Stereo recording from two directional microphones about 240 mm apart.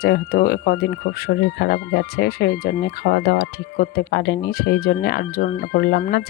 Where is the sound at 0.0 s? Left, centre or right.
Left.